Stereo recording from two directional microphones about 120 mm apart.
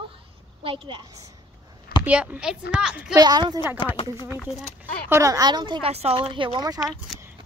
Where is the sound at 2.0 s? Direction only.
10° right (ahead or behind).